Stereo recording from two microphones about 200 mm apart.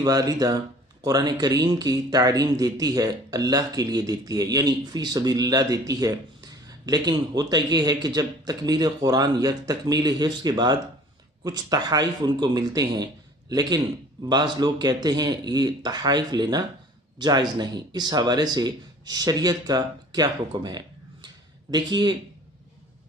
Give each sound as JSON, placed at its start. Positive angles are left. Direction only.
{"t": 0.0, "sound": "speech", "side_deg": -20}